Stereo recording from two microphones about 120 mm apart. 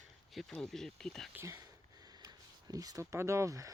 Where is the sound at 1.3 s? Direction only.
20° right (ahead or behind).